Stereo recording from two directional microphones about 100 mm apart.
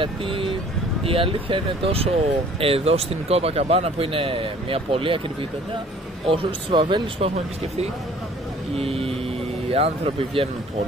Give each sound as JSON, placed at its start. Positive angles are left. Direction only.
{"t": 0.0, "sound": "speech", "side_deg": -60}
{"t": 6.2, "sound": "a man's voice", "side_deg": -60}
{"t": 7.2, "sound": "speech", "side_deg": -85}
{"t": 8.7, "sound": "speech", "side_deg": -75}